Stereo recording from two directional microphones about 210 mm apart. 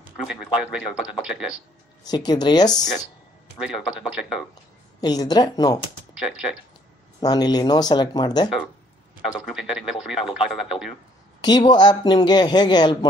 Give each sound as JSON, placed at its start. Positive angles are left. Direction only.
{"t": 0.3, "sound": "speech", "side_deg": -5}
{"t": 2.0, "sound": "speech", "side_deg": 20}
{"t": 2.7, "sound": "speech", "side_deg": 0}
{"t": 5.0, "sound": "speech", "side_deg": 20}
{"t": 6.1, "sound": "speech", "side_deg": -5}
{"t": 7.2, "sound": "speech", "side_deg": 20}
{"t": 9.5, "sound": "speech", "side_deg": -5}
{"t": 11.4, "sound": "speech", "side_deg": 20}